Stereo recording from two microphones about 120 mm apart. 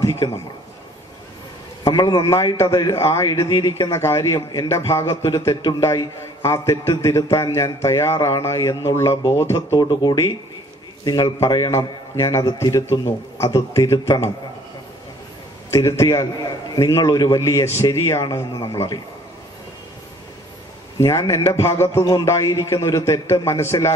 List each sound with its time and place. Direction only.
0.0 s a man's voice: 25° left (ahead or behind)
1.9 s a man's voice: 35° left (ahead or behind)
9.8 s a man's voice: 35° left (ahead or behind)
15.7 s a man's voice: 25° left (ahead or behind)
21.0 s a man's voice: 25° left (ahead or behind)